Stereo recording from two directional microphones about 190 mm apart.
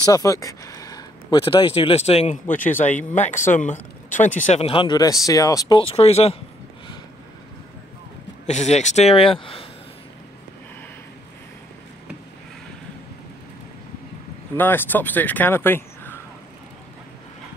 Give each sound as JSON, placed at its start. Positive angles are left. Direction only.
{"t": 0.0, "sound": "speech", "side_deg": 20}
{"t": 2.4, "sound": "speech", "side_deg": 10}
{"t": 3.0, "sound": "speech", "side_deg": 40}
{"t": 8.5, "sound": "speech", "side_deg": 35}
{"t": 14.6, "sound": "speech", "side_deg": 10}